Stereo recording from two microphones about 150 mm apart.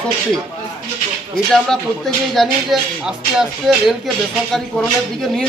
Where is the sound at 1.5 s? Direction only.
Centre (ahead or behind).